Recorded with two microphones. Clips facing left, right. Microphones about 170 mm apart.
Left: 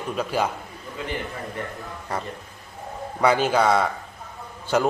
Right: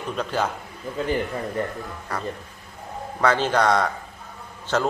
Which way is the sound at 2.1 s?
25° left (ahead or behind).